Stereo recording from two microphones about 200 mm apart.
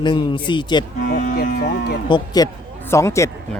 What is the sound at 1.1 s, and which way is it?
Speech, 40° left (ahead or behind).